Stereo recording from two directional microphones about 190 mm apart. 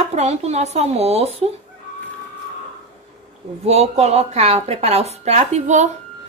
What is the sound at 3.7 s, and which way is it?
Speech, 35° right (ahead or behind).